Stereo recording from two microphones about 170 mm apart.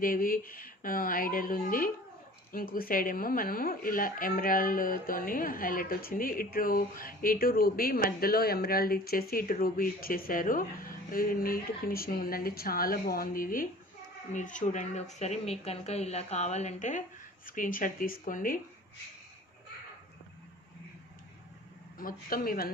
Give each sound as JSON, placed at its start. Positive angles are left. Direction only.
{"t": 0.0, "sound": "speech", "side_deg": 55}
{"t": 21.9, "sound": "speech", "side_deg": 55}